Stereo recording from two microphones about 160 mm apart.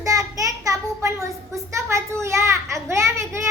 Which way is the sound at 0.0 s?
20° right (ahead or behind).